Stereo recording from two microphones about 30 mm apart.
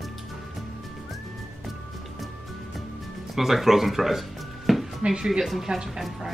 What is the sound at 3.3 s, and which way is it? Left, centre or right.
Music, centre.